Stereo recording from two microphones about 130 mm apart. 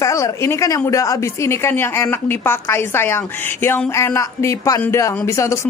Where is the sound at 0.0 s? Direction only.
25° left (ahead or behind).